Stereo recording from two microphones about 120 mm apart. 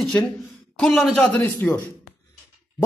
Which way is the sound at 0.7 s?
10° left (ahead or behind).